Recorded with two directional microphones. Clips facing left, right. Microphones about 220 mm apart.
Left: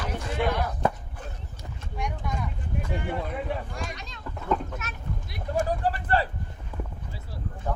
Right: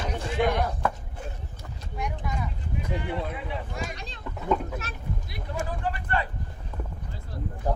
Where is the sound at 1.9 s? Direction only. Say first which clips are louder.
Even; 5° right (ahead or behind).